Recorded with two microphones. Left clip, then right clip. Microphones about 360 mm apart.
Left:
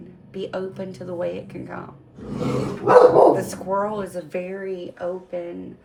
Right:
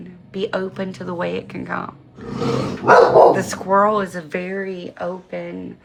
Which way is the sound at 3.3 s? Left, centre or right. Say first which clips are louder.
Right 7 dB; right.